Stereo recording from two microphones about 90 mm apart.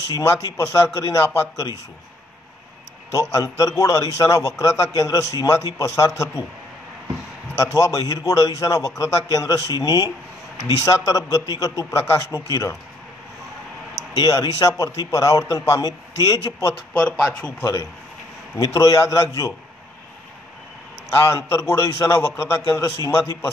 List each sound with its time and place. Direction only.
0.1 s a man's voice: 35° left (ahead or behind)
3.1 s a man's voice: 35° left (ahead or behind)
7.5 s a man's voice: 35° left (ahead or behind)
14.1 s a man's voice: 45° left (ahead or behind)
18.6 s a man's voice: 40° left (ahead or behind)
21.1 s a man's voice: 30° left (ahead or behind)